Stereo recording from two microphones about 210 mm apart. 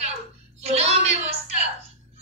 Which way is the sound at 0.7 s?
30° right (ahead or behind).